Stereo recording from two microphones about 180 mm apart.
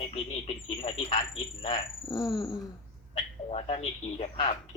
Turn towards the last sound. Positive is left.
turn(degrees=35)  # may be behind; listen again after turning